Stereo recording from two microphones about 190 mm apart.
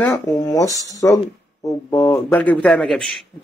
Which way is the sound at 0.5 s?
15° left (ahead or behind).